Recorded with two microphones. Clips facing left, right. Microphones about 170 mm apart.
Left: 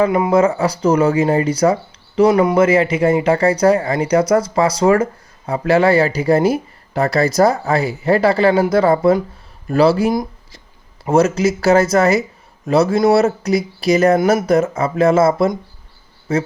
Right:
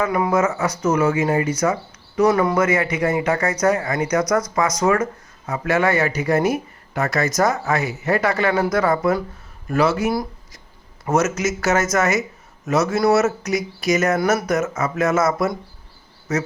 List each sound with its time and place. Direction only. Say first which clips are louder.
0.0 s speech: left 5 dB; 25° left (ahead or behind)
10.1 s speech: left 4 dB; 20° left (ahead or behind)
11.0 s speech: left 6 dB; 30° left (ahead or behind)